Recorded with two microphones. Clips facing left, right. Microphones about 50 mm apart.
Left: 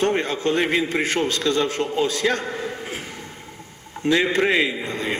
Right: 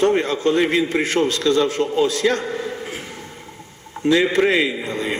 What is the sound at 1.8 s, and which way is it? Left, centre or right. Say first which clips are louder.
Speech: right 4 dB; left.